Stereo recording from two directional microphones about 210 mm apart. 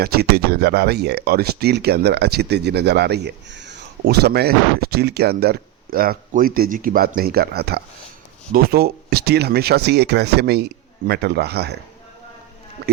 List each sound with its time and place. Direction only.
0.0 s speech: 50° right (ahead or behind)
12.8 s speech: 45° right (ahead or behind)